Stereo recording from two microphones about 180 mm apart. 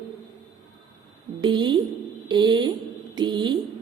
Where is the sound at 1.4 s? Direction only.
25° right (ahead or behind).